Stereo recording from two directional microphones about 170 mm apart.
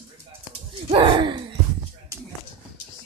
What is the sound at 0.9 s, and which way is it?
Speech, 25° right (ahead or behind).